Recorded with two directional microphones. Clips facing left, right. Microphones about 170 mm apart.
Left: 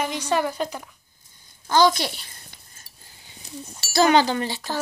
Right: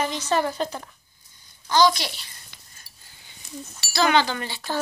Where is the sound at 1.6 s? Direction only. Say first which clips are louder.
Left 1 dB; 50° left (ahead or behind).